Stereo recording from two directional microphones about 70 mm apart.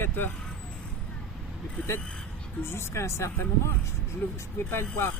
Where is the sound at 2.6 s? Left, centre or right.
Left.